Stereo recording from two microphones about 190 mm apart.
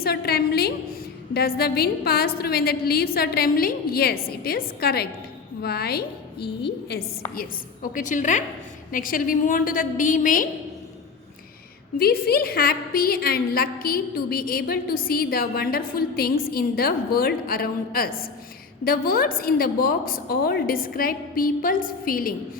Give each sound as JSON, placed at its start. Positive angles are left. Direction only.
{"t": 0.0, "sound": "a sound", "side_deg": 55}
{"t": 1.3, "sound": "a woman's voice", "side_deg": 55}
{"t": 7.3, "sound": "a woman's voice", "side_deg": 45}
{"t": 11.9, "sound": "a woman's voice", "side_deg": 55}